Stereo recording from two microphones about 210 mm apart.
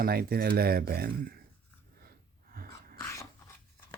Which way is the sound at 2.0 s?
45° right (ahead or behind).